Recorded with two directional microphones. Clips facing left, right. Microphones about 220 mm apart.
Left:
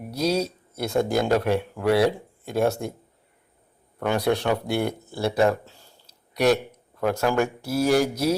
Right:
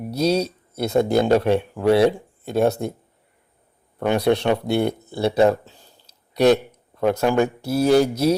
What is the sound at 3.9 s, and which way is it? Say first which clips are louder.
A man's voice: right 4 dB; 20° right (ahead or behind).